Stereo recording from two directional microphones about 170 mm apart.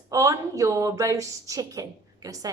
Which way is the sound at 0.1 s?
20° right (ahead or behind).